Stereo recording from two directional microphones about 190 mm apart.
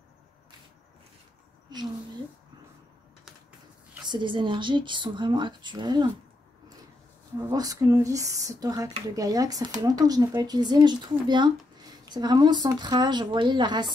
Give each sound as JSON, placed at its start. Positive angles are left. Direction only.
{"t": 4.0, "sound": "speech", "side_deg": -25}
{"t": 7.3, "sound": "speech", "side_deg": -20}